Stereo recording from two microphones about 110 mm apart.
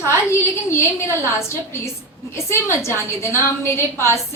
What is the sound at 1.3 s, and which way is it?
A woman's voice, 25° left (ahead or behind).